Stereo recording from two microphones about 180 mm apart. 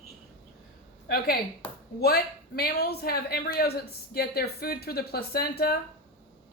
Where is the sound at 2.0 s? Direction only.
60° left (ahead or behind).